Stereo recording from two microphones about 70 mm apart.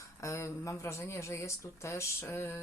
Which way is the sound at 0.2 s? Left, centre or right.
Left.